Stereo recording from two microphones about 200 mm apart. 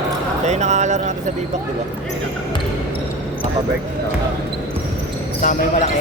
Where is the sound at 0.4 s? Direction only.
35° right (ahead or behind).